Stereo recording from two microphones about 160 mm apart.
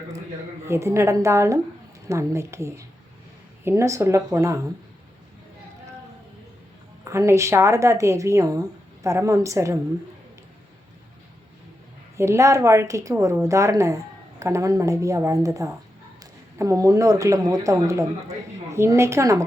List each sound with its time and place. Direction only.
0.7 s a woman's voice: 15° right (ahead or behind)
7.0 s speech: 20° right (ahead or behind)
12.1 s a woman's voice: 20° right (ahead or behind)